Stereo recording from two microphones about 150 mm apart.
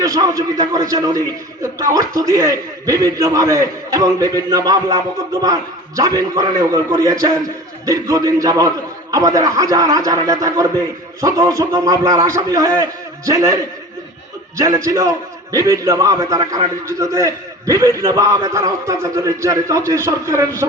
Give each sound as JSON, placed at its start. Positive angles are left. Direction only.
{"t": 0.0, "sound": "a man's voice", "side_deg": -25}
{"t": 14.6, "sound": "a man's voice", "side_deg": -25}